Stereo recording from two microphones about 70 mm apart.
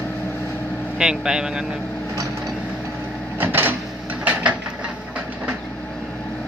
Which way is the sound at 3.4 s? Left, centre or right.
Right.